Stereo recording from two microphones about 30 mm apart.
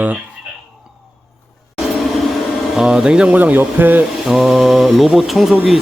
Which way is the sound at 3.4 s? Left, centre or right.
Right.